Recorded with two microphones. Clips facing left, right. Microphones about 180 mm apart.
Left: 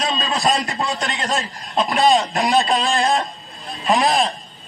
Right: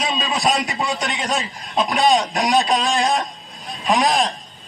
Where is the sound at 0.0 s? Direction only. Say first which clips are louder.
Even; centre (ahead or behind).